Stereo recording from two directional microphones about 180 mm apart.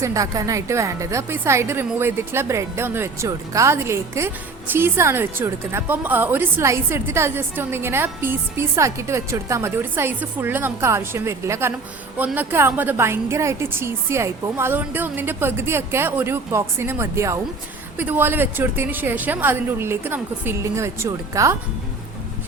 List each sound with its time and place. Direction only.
0.0 s a woman's voice: 20° right (ahead or behind)